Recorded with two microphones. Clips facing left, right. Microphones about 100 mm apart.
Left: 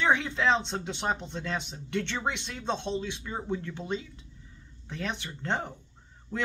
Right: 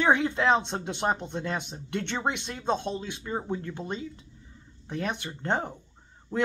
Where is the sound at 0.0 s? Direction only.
10° right (ahead or behind).